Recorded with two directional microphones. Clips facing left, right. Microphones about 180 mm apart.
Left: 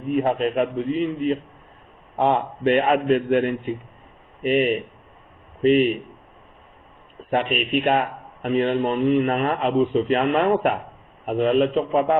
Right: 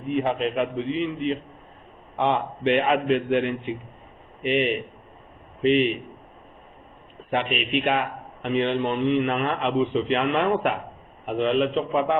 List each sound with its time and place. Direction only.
0.1 s speech: 45° left (ahead or behind)
7.3 s speech: 45° left (ahead or behind)